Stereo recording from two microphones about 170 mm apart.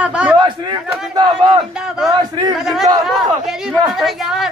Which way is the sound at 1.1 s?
30° right (ahead or behind).